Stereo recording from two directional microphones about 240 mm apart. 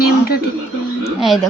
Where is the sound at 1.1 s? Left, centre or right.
Centre.